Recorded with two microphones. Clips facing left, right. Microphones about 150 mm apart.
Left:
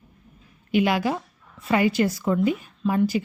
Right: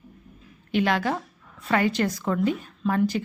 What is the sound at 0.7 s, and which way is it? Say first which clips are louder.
A woman's voice: left 2 dB; 10° left (ahead or behind).